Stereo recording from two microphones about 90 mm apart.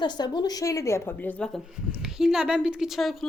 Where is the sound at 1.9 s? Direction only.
5° right (ahead or behind).